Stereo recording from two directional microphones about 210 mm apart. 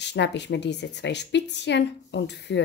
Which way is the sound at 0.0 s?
55° left (ahead or behind).